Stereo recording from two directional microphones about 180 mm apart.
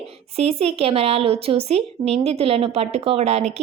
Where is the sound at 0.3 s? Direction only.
35° right (ahead or behind).